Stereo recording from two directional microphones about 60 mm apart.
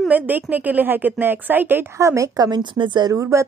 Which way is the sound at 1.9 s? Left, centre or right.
Right.